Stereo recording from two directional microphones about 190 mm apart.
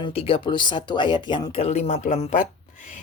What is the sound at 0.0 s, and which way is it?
Speech, 30° left (ahead or behind).